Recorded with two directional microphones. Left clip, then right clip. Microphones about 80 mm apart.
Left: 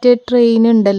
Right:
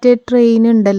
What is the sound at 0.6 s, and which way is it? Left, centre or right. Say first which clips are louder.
Speech: even; left.